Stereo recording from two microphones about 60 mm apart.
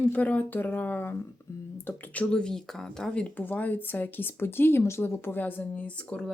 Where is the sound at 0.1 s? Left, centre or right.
Left.